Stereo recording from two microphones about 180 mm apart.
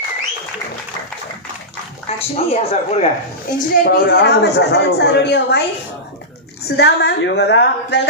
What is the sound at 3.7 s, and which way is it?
A woman's voice, 60° left (ahead or behind).